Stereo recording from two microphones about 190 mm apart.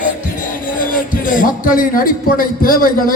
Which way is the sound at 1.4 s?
45° left (ahead or behind).